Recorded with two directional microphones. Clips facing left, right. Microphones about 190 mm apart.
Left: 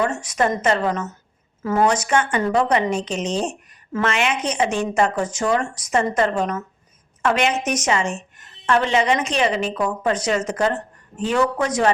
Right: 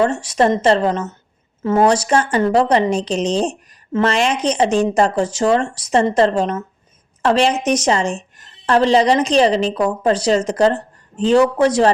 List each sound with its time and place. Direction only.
0.0 s a woman's voice: 30° right (ahead or behind)